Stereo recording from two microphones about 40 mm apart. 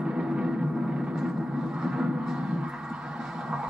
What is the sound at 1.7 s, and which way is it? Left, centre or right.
Music, right.